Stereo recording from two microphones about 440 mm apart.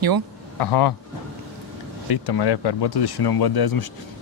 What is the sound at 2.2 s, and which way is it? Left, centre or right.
Speech, left.